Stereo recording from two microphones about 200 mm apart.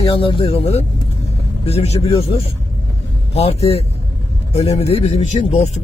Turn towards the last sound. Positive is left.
turn(degrees=35)  # may be behind; listen again after turning